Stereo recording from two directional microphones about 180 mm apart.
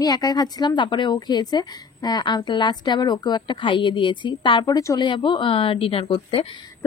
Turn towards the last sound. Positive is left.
turn(degrees=30)  # may be behind; listen again after turning